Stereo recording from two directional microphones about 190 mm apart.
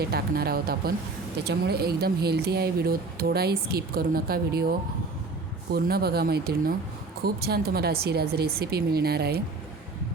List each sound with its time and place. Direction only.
0.0 s speech: 55° right (ahead or behind)
5.7 s speech: 55° right (ahead or behind)